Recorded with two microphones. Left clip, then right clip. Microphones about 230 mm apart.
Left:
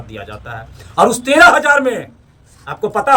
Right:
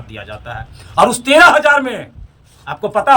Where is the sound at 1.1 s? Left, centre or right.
Left.